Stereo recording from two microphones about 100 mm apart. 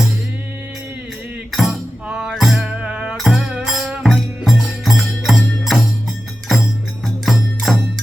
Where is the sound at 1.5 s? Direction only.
Centre (ahead or behind).